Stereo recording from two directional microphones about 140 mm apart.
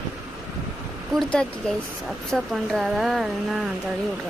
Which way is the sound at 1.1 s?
5° left (ahead or behind).